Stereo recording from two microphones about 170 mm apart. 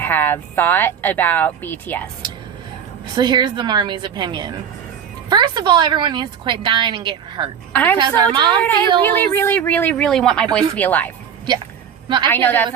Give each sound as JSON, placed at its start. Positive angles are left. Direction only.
{"t": 0.0, "sound": "speech", "side_deg": 10}
{"t": 3.2, "sound": "a woman's voice", "side_deg": -25}
{"t": 7.7, "sound": "a woman's voice", "side_deg": 10}
{"t": 7.9, "sound": "a woman's voice", "side_deg": -25}
{"t": 9.0, "sound": "speech", "side_deg": 10}
{"t": 12.0, "sound": "a woman's voice", "side_deg": -25}
{"t": 12.3, "sound": "speech", "side_deg": 10}